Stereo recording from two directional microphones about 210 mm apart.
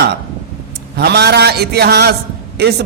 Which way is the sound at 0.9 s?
50° right (ahead or behind).